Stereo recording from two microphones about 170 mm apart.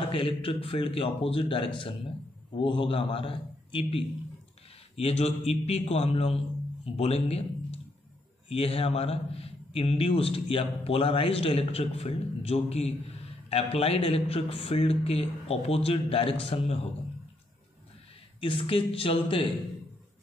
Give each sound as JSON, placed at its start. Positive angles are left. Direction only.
{"t": 0.1, "sound": "a man's voice", "side_deg": 35}
{"t": 18.4, "sound": "a man's voice", "side_deg": 30}